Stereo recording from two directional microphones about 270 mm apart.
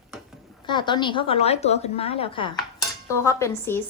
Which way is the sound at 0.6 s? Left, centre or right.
Centre.